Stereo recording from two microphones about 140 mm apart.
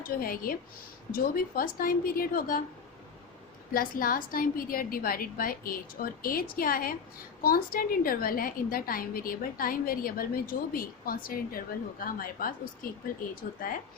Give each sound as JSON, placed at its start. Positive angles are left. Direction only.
{"t": 0.0, "sound": "a woman's voice", "side_deg": 90}
{"t": 3.7, "sound": "a woman's voice", "side_deg": 90}